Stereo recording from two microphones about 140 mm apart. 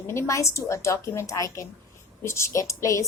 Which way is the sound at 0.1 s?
20° left (ahead or behind).